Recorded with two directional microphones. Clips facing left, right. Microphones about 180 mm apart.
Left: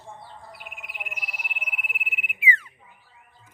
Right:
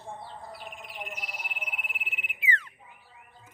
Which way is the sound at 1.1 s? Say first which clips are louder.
Right 1 dB; 30° right (ahead or behind).